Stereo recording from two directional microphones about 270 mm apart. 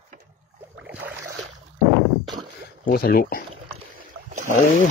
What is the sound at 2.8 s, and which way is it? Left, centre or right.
Speech, left.